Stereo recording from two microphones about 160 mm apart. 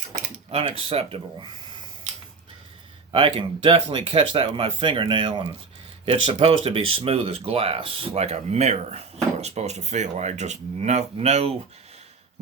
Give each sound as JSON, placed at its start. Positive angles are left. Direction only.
{"t": 0.5, "sound": "speech", "side_deg": -40}
{"t": 3.1, "sound": "speech", "side_deg": -35}